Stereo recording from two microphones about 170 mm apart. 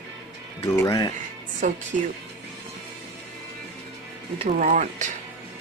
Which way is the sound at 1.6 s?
45° right (ahead or behind).